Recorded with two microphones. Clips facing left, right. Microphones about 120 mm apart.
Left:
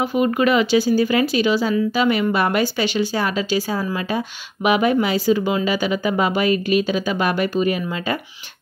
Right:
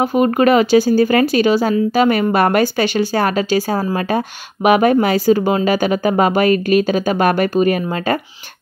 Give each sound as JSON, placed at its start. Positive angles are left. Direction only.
{"t": 0.0, "sound": "speech", "side_deg": -45}